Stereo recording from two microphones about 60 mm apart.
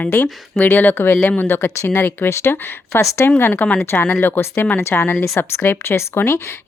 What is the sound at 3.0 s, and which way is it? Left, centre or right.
Speech, left.